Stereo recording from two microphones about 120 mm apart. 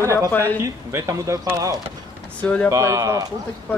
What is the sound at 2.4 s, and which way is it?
Speech, 10° left (ahead or behind).